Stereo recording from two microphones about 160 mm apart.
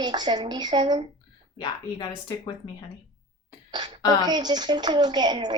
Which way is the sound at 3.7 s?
25° right (ahead or behind).